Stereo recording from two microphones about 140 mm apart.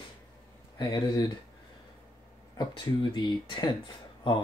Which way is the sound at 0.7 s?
25° left (ahead or behind).